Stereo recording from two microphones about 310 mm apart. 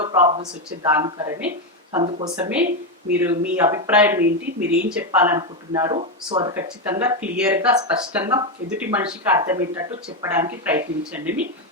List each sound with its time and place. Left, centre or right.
0.0 s speech: centre